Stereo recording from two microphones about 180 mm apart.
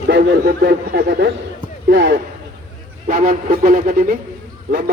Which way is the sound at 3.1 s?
55° right (ahead or behind).